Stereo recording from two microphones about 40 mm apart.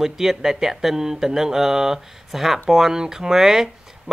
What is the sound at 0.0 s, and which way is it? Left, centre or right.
Speech, centre.